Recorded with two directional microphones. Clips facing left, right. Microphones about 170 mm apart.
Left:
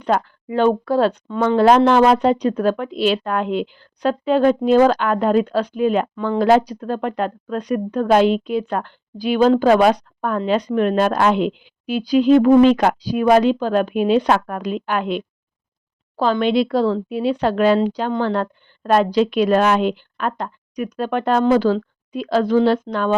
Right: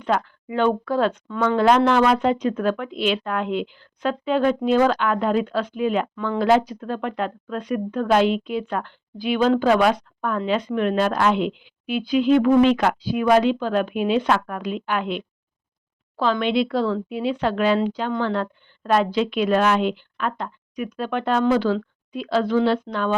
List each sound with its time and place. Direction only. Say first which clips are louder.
0.0 s speech: left 3 dB; 40° left (ahead or behind)